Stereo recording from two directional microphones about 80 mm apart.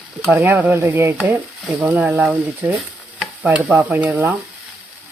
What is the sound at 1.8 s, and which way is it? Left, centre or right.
Speech, right.